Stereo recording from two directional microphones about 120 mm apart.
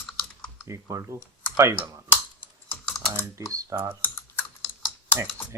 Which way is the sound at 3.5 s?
30° right (ahead or behind).